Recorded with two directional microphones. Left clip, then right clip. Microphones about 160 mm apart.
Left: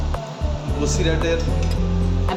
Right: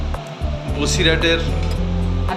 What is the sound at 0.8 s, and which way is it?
Speech, 5° right (ahead or behind).